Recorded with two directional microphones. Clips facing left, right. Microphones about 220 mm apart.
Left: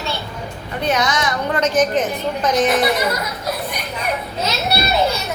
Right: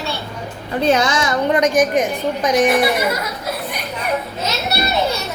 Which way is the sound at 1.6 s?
15° right (ahead or behind).